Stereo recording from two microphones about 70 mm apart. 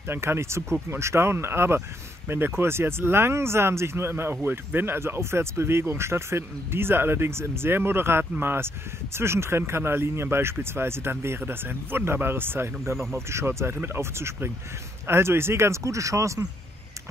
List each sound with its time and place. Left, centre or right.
0.1 s speech: right